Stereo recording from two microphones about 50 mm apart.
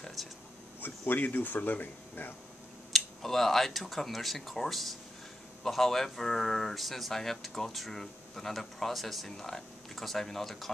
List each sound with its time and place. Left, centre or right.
0.0 s a sound: centre
0.7 s speech: left
2.9 s speech: centre